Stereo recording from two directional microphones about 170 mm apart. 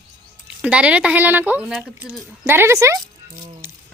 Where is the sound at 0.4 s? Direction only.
5° right (ahead or behind).